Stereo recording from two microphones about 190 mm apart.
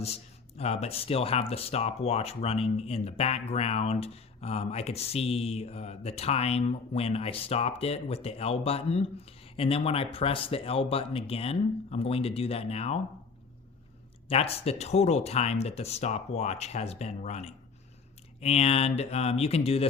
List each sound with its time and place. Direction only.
0.0 s speech: 35° left (ahead or behind)
14.3 s speech: 30° left (ahead or behind)